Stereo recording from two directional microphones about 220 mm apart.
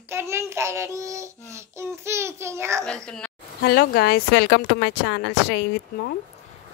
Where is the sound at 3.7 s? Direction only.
45° left (ahead or behind).